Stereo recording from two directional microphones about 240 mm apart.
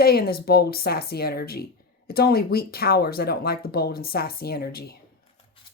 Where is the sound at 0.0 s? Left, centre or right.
Left.